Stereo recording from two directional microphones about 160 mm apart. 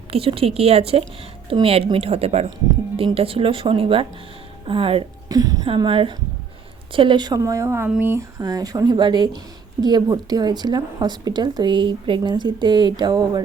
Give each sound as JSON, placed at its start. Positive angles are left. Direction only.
{"t": 0.1, "sound": "speech", "side_deg": -35}
{"t": 5.3, "sound": "a woman's voice", "side_deg": -25}